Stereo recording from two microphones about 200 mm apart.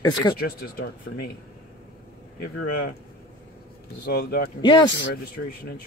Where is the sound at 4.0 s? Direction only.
50° left (ahead or behind).